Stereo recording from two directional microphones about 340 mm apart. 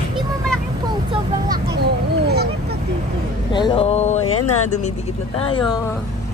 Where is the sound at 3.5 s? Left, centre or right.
Centre.